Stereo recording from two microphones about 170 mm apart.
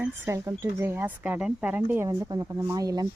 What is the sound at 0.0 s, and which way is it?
Speech, 15° right (ahead or behind).